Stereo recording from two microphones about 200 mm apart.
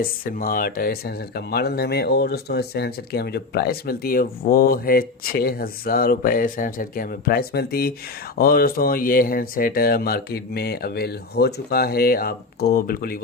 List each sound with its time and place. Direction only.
0.0 s speech: 45° left (ahead or behind)